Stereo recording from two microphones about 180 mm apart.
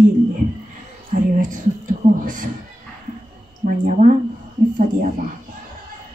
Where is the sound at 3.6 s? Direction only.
50° right (ahead or behind).